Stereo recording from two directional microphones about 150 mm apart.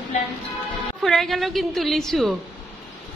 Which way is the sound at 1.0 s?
Centre (ahead or behind).